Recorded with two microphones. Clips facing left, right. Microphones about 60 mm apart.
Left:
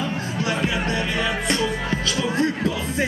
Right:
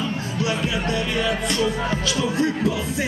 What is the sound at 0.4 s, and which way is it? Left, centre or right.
Music, left.